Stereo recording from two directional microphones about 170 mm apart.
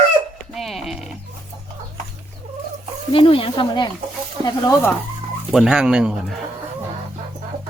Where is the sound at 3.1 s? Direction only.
30° left (ahead or behind).